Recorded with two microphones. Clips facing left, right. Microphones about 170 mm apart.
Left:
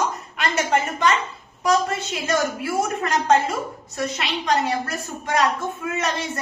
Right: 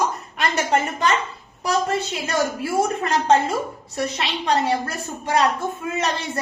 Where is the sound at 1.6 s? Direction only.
30° right (ahead or behind).